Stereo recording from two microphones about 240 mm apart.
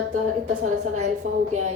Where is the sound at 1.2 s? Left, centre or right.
Right.